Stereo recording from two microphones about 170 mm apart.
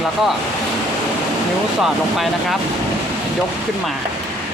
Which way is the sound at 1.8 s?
Centre (ahead or behind).